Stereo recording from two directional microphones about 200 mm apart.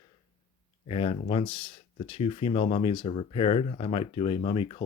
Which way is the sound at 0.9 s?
30° left (ahead or behind).